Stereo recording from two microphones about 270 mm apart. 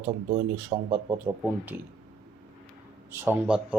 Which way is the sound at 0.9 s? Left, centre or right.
Centre.